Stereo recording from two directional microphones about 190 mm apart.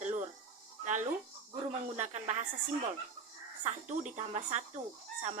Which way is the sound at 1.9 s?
40° right (ahead or behind).